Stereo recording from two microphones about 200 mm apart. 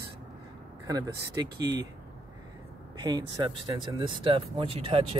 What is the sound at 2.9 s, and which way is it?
Speech, 20° right (ahead or behind).